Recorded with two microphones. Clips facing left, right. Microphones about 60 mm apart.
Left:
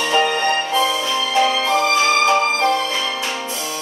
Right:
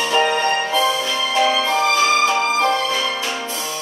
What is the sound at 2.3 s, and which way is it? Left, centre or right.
Music, centre.